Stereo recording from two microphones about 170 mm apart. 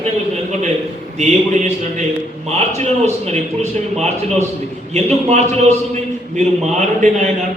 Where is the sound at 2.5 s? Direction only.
40° right (ahead or behind).